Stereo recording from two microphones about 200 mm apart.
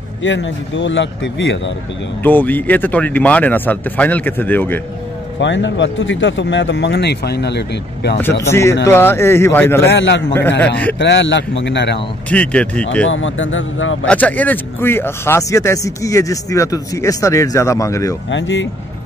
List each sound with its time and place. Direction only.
0.2 s speech: 65° left (ahead or behind)
2.2 s speech: 10° left (ahead or behind)
5.4 s speech: 65° left (ahead or behind)
8.2 s speech: 10° left (ahead or behind)
9.9 s speech: 60° left (ahead or behind)
10.6 s speech: 5° left (ahead or behind)
11.0 s speech: 65° left (ahead or behind)
12.3 s speech: 5° left (ahead or behind)
13.1 s speech: 70° left (ahead or behind)
14.0 s speech: 5° left (ahead or behind)
18.3 s speech: 65° left (ahead or behind)